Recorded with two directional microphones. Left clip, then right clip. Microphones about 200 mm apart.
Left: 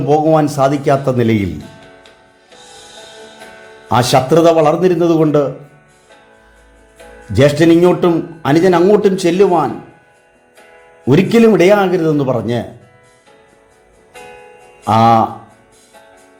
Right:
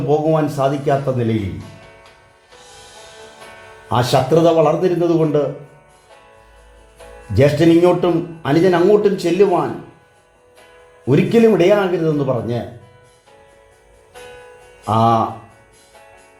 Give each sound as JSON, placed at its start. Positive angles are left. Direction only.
{"t": 0.1, "sound": "a man's voice", "side_deg": 20}
{"t": 3.8, "sound": "speech", "side_deg": 20}
{"t": 7.3, "sound": "a man's voice", "side_deg": 15}
{"t": 11.0, "sound": "speech", "side_deg": 20}
{"t": 14.8, "sound": "a man's voice", "side_deg": 15}